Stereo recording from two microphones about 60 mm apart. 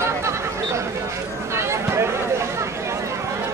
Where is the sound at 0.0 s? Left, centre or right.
Right.